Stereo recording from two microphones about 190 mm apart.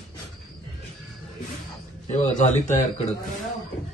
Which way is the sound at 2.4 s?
40° left (ahead or behind).